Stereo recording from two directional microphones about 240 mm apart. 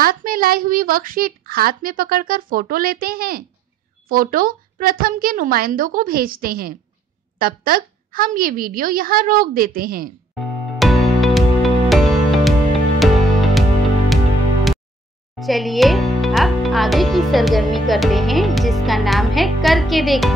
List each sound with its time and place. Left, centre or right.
0.0 s speech: right
10.3 s music: centre
15.3 s speech: centre